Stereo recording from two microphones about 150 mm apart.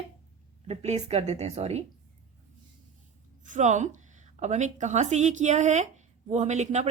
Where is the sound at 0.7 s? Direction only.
45° right (ahead or behind).